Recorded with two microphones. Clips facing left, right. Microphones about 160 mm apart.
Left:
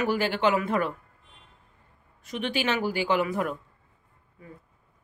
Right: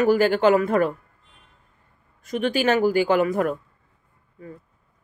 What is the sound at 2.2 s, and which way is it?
Speech, 45° right (ahead or behind).